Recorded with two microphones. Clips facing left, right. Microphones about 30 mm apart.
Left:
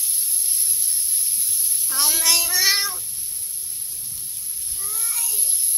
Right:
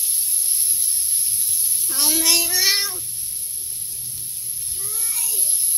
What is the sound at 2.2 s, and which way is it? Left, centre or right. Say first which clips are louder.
Child singing: even; right.